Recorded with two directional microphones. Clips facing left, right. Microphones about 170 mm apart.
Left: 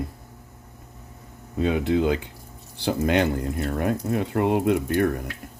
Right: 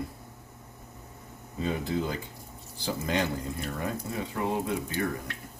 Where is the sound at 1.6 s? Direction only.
75° left (ahead or behind).